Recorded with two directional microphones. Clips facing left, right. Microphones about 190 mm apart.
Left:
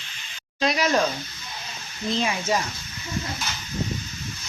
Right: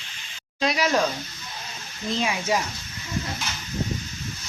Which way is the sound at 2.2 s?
5° right (ahead or behind).